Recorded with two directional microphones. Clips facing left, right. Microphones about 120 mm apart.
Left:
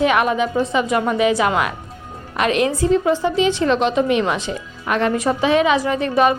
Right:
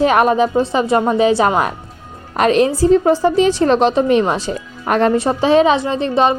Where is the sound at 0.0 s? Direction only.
35° right (ahead or behind).